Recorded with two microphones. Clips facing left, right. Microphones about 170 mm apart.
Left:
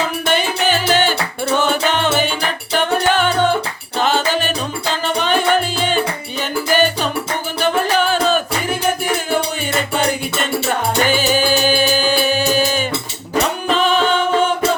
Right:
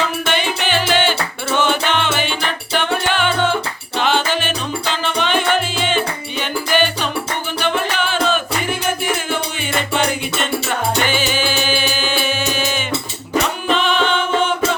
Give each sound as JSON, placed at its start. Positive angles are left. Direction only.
{"t": 0.3, "sound": "music", "side_deg": 40}
{"t": 11.0, "sound": "music", "side_deg": 40}